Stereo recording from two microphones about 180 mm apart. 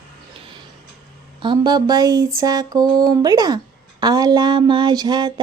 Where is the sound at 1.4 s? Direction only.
25° right (ahead or behind).